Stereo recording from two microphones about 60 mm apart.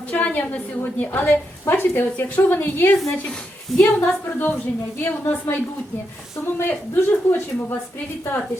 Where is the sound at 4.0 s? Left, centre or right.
Left.